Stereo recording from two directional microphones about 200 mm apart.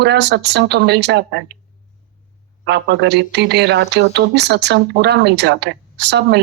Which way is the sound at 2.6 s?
60° right (ahead or behind).